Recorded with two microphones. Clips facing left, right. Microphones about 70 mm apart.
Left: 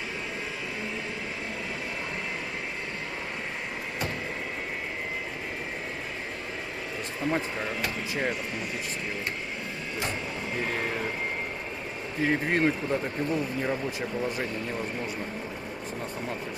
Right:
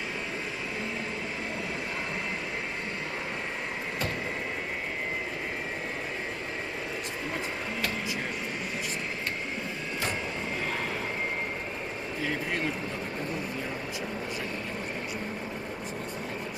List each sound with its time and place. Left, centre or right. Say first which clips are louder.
12.3 s speech: left 7 dB; left